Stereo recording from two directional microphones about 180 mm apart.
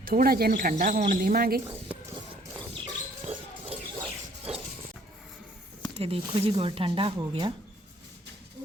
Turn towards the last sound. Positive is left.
turn(degrees=-30)  # may be behind; listen again after turning